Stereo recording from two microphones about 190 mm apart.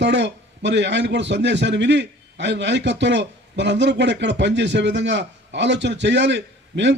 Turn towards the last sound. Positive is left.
turn(degrees=-65)  # may be behind; listen again after turning